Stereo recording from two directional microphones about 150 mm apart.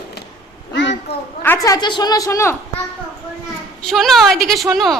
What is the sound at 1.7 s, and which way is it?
Speech, 30° left (ahead or behind).